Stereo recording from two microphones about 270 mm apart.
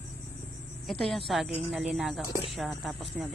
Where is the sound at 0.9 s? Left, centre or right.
Centre.